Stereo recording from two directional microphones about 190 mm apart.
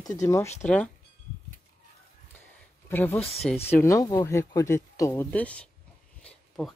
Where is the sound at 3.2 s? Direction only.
30° left (ahead or behind).